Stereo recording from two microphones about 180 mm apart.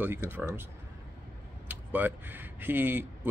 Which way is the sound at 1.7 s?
10° right (ahead or behind).